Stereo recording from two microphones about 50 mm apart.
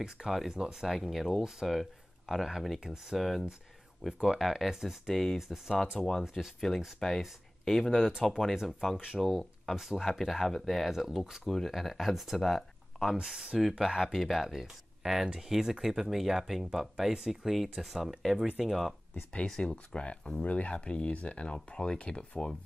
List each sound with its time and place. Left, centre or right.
0.0 s speech: centre
2.8 s speech: centre
3.2 s speech: centre
8.9 s speech: centre
9.4 s speech: centre
19.3 s speech: centre